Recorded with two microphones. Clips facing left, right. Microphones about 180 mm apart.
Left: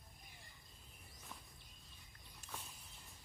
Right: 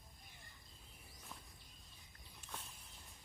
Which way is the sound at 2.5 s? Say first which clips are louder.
Even; 5° left (ahead or behind).